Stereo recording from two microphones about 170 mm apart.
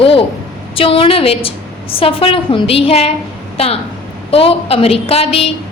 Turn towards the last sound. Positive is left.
turn(degrees=35)  # may be behind; listen again after turning